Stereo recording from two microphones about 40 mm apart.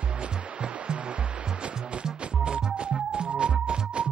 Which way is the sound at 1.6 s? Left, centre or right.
Right.